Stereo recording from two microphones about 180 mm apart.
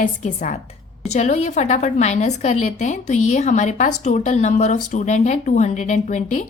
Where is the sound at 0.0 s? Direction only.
45° left (ahead or behind).